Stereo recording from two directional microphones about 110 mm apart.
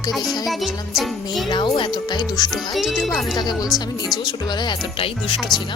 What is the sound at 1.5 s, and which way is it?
Speech, 50° left (ahead or behind).